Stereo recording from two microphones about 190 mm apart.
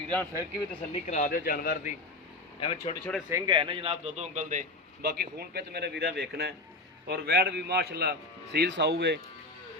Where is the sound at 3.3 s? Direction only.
25° right (ahead or behind); by 5.1 s 40° right (ahead or behind).